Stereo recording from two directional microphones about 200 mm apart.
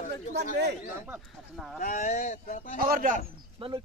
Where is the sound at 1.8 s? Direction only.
40° left (ahead or behind).